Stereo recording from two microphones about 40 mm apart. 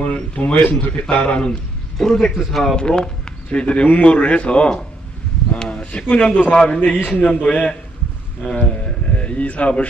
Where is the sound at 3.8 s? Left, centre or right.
Left.